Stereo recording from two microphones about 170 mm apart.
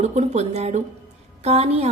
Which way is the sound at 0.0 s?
40° right (ahead or behind).